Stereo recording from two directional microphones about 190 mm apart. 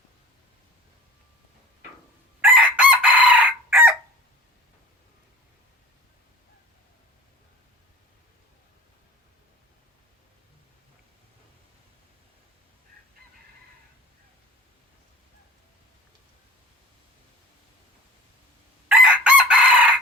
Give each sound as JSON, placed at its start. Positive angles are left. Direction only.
{"t": 2.4, "sound": "chicken", "side_deg": -10}
{"t": 18.9, "sound": "chicken", "side_deg": -5}